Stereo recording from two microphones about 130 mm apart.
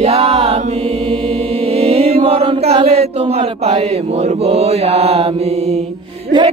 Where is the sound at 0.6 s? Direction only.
55° right (ahead or behind).